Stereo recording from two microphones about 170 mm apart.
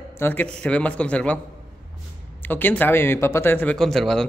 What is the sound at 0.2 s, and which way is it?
A man's voice, 10° left (ahead or behind).